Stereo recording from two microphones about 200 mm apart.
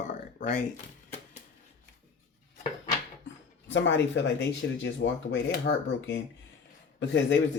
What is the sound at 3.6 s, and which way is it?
Speech, 65° left (ahead or behind).